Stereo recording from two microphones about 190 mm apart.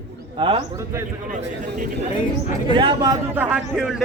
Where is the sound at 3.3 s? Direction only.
10° right (ahead or behind).